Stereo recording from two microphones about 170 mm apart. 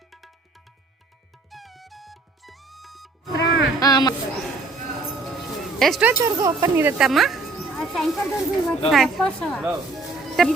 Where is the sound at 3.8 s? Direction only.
20° left (ahead or behind).